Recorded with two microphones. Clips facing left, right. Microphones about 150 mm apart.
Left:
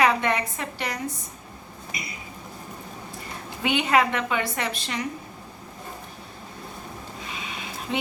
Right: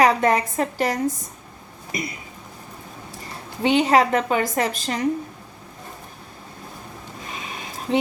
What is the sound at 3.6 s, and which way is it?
Speech, 35° right (ahead or behind).